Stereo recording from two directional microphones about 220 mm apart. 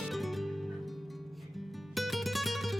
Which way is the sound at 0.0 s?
Centre (ahead or behind).